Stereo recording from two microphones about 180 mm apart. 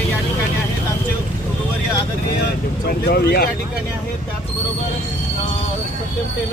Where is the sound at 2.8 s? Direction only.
60° left (ahead or behind).